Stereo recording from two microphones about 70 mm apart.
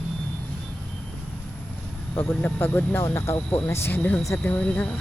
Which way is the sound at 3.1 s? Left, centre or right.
Left.